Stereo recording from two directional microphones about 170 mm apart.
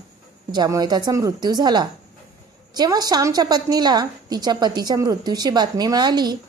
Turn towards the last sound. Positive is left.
turn(degrees=-25)  # may be behind; listen again after turning